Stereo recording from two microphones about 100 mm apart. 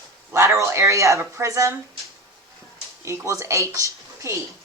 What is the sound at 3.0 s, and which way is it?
Speech, 30° right (ahead or behind).